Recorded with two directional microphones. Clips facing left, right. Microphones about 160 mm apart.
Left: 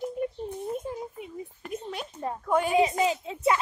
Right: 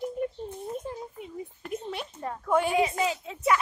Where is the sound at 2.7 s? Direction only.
20° left (ahead or behind).